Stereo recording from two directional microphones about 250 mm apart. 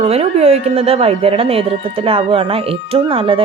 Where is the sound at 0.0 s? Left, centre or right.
Right.